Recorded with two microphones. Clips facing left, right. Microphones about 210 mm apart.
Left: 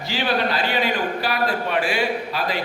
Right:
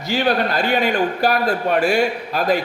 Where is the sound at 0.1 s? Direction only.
45° right (ahead or behind).